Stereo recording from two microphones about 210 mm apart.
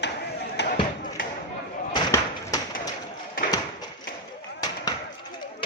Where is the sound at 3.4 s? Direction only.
45° left (ahead or behind).